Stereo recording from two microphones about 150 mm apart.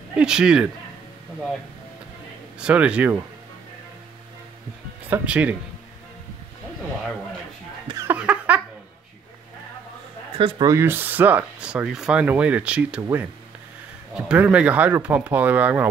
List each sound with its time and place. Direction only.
0.1 s speech: 5° right (ahead or behind)
2.6 s speech: 10° right (ahead or behind)
5.1 s speech: 10° right (ahead or behind)
8.1 s giggle: 10° right (ahead or behind)
10.3 s speech: 35° right (ahead or behind)
10.7 s speech: 15° right (ahead or behind)